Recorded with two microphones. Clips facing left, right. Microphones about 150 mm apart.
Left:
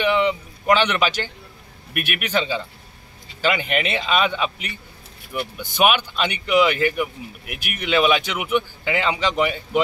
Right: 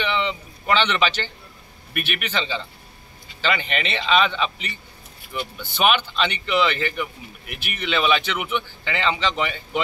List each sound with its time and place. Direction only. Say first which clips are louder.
0.0 s speech: left 5 dB; 5° left (ahead or behind)